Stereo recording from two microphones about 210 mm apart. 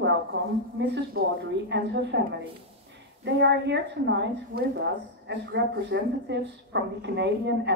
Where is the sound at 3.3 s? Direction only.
60° right (ahead or behind).